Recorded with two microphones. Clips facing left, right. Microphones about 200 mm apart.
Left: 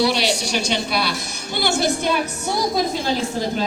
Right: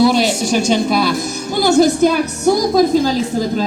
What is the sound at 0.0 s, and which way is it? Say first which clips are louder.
A woman's voice: right 7 dB; 45° right (ahead or behind).